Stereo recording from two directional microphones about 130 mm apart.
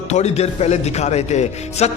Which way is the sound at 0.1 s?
55° left (ahead or behind).